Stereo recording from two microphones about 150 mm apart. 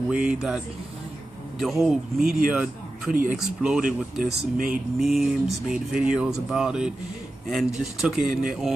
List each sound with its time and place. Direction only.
0.1 s speech: 10° right (ahead or behind)
1.6 s a man's voice: centre (ahead or behind)
3.8 s speech: 80° right
4.9 s speech: centre (ahead or behind)